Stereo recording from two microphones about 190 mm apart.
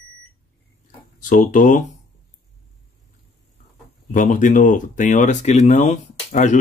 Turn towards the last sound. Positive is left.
turn(degrees=40)  # may be behind; listen again after turning